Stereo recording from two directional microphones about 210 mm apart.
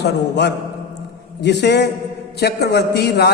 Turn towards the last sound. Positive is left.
turn(degrees=50)  # may be behind; listen again after turning